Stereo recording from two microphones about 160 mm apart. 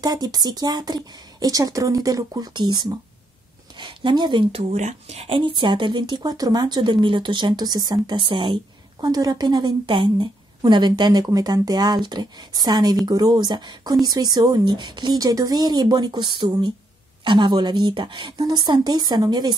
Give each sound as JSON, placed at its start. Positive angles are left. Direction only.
{"t": 0.0, "sound": "speech", "side_deg": -25}